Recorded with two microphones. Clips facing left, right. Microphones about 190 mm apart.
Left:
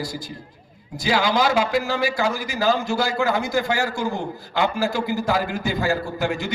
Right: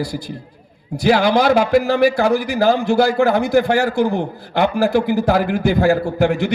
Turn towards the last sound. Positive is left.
turn(degrees=-60)  # may be behind; listen again after turning